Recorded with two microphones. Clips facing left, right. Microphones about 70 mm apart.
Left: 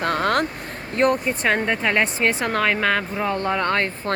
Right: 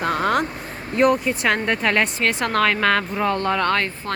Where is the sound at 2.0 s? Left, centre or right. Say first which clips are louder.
Left 1 dB; left.